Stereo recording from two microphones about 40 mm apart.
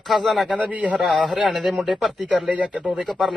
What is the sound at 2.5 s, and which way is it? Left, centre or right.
Speech, right.